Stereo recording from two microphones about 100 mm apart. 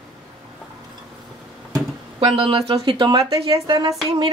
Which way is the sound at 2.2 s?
65° right (ahead or behind).